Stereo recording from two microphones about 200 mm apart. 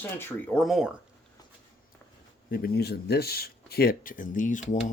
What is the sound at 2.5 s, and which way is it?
Speech, 50° left (ahead or behind).